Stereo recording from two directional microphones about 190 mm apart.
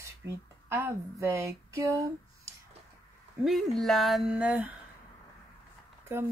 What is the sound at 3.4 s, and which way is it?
Speech, centre (ahead or behind).